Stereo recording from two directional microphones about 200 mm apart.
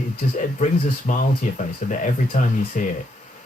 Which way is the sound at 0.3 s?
40° left (ahead or behind).